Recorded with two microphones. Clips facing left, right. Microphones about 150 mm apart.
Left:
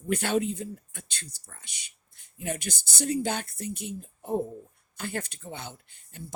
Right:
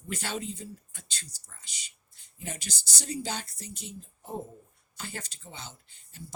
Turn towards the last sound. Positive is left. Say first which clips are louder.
# left 4 dB
turn(degrees=55)  # may be behind; listen again after turning